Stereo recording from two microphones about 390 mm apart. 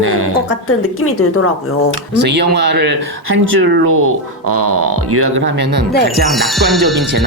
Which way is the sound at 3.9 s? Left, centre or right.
Right.